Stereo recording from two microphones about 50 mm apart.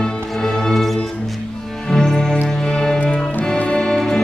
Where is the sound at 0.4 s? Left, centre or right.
Centre.